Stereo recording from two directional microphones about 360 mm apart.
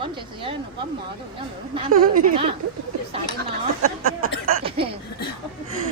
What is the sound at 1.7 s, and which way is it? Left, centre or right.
Speech, centre.